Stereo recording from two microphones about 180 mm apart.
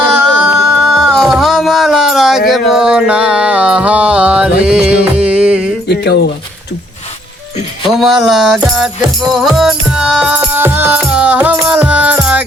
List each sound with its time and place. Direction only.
0.4 s a sound: centre (ahead or behind)
2.5 s music: 5° right (ahead or behind)
5.9 s speech: 65° left (ahead or behind)
7.9 s music: centre (ahead or behind)